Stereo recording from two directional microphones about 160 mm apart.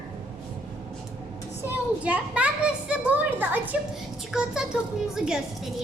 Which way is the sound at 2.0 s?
10° right (ahead or behind).